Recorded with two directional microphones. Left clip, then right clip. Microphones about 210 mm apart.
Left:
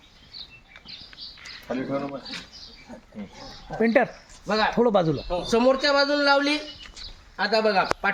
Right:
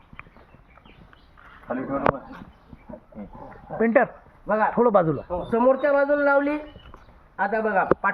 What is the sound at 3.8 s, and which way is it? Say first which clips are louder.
Speech: right 1 dB; 25° left (ahead or behind).